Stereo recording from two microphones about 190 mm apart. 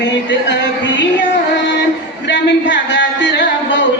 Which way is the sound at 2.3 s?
70° left (ahead or behind).